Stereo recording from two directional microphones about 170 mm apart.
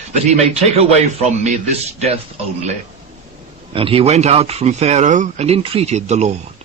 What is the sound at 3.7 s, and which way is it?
Speech, 35° right (ahead or behind).